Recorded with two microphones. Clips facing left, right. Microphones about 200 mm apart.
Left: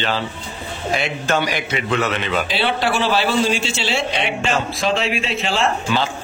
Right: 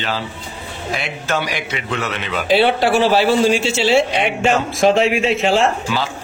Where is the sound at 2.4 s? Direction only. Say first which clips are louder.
Right 6 dB; 50° right (ahead or behind).